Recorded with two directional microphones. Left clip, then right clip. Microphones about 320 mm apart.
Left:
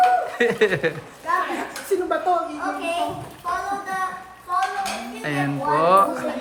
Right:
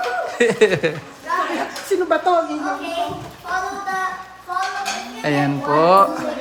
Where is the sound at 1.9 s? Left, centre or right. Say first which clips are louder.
Right 3 dB; right.